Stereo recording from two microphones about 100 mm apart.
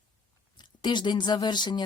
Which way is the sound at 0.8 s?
50° left (ahead or behind).